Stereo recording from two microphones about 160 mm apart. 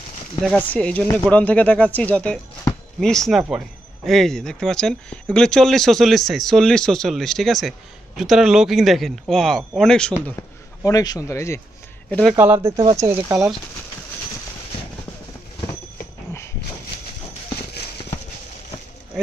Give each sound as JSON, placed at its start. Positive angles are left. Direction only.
{"t": 0.6, "sound": "speech", "side_deg": 10}
{"t": 10.8, "sound": "speech", "side_deg": 20}
{"t": 12.1, "sound": "speech", "side_deg": 5}
{"t": 12.4, "sound": "speech", "side_deg": -15}